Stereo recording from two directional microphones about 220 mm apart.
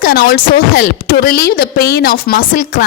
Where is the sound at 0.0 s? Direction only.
45° left (ahead or behind).